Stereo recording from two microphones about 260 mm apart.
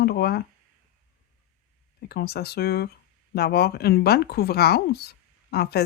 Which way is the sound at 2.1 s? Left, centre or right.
Left.